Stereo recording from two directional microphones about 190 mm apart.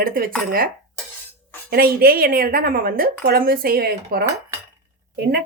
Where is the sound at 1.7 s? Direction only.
50° right (ahead or behind).